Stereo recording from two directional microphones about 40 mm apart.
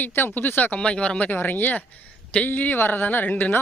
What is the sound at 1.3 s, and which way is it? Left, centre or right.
A woman's voice, left.